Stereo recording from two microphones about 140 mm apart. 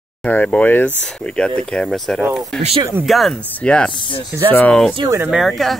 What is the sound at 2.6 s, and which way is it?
Speech, 45° right (ahead or behind).